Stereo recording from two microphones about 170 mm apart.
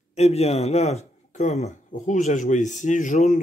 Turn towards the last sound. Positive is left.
turn(degrees=45)  # may be behind; listen again after turning